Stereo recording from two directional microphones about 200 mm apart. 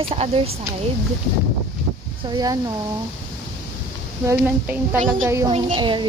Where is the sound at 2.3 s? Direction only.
20° right (ahead or behind).